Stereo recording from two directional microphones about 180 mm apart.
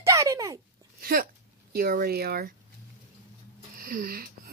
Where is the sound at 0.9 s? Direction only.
55° right (ahead or behind).